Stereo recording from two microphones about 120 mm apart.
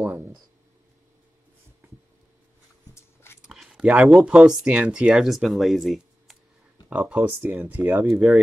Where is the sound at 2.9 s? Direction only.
20° left (ahead or behind).